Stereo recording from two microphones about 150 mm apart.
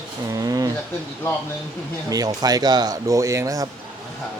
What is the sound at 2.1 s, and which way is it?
Speech, 25° right (ahead or behind).